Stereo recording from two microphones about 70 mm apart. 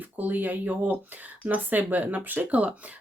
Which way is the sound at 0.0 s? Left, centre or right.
Right.